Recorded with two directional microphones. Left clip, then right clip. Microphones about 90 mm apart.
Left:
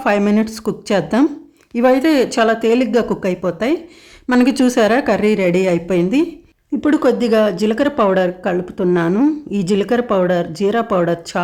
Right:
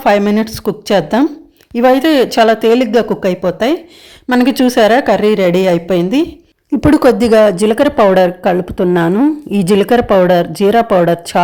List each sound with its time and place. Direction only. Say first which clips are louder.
0.3 s speech: right 3 dB; 20° right (ahead or behind)
6.8 s a woman's voice: right 6 dB; 75° right (ahead or behind); by 9.1 s 40° right (ahead or behind)
9.5 s a woman's voice: right 6 dB; 55° right (ahead or behind)